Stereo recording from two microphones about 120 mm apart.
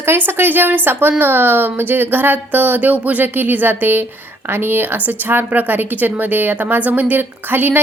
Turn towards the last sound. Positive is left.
turn(degrees=-15)  # may be behind; listen again after turning